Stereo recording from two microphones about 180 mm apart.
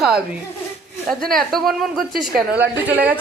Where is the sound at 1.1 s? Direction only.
Centre (ahead or behind).